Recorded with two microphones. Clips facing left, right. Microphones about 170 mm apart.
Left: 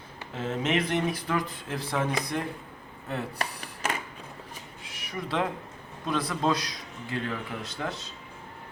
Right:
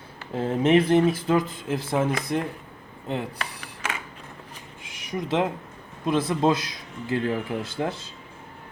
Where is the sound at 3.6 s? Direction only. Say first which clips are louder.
Left 1 dB; 35° left (ahead or behind).